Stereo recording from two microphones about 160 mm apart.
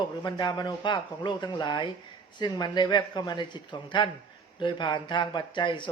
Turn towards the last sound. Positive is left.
turn(degrees=30)  # may be behind; listen again after turning